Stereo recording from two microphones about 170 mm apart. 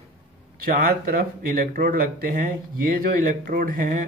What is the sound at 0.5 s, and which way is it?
Speech, 55° right (ahead or behind).